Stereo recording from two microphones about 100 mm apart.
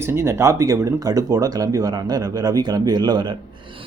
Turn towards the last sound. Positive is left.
turn(degrees=-45)  # may be behind; listen again after turning